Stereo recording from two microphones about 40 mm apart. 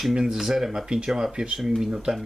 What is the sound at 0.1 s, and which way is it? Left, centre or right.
Speech, centre.